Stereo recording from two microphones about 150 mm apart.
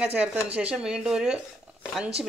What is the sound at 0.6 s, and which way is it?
Speech, 5° right (ahead or behind).